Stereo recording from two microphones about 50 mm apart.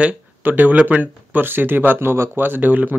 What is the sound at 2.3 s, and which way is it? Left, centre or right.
Speech, right.